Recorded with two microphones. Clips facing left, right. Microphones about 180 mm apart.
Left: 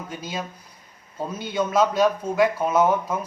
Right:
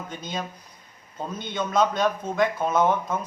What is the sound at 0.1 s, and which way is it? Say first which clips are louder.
A man's voice: left 1 dB; 5° left (ahead or behind).